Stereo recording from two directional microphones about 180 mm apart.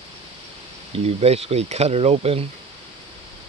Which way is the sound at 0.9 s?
35° right (ahead or behind).